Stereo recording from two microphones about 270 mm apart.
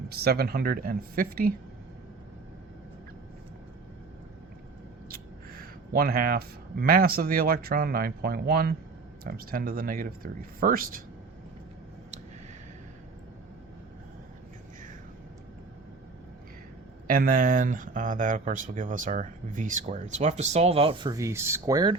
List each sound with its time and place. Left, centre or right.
0.1 s speech: right
5.0 s speech: right
17.1 s speech: right; by 21.9 s centre